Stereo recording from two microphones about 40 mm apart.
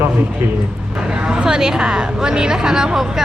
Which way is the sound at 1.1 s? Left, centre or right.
Right.